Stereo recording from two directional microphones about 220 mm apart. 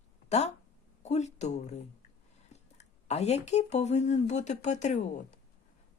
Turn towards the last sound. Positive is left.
turn(degrees=35)  # may be behind; listen again after turning